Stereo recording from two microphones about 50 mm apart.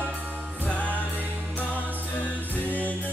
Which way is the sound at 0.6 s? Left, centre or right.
Left.